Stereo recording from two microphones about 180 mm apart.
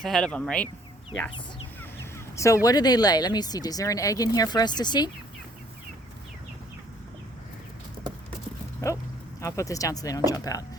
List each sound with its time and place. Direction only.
0.0 s speech: 5° left (ahead or behind)
2.3 s speech: 15° left (ahead or behind)
9.4 s speech: 15° left (ahead or behind)